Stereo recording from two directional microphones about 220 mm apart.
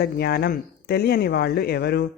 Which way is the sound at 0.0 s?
45° left (ahead or behind).